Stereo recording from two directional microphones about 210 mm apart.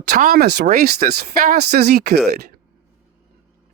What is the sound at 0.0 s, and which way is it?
Speech, 45° right (ahead or behind).